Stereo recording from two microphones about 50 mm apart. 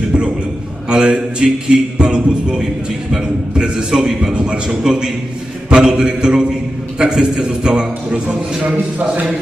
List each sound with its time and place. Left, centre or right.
0.9 s a man's voice: centre
8.6 s a man's voice: right